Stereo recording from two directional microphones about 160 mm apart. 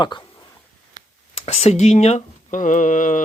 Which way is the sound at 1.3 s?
40° left (ahead or behind).